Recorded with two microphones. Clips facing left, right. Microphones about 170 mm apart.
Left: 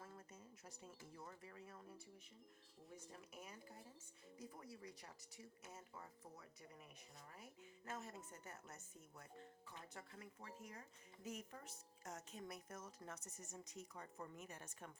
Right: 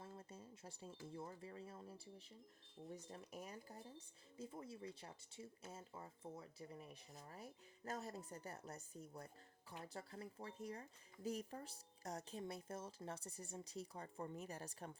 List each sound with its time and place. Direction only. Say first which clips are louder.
0.0 s speech: right 3 dB; 30° right (ahead or behind)